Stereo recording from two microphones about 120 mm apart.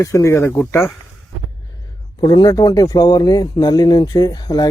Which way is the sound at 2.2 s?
35° left (ahead or behind).